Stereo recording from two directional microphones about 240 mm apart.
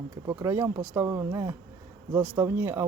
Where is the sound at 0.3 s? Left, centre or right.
Centre.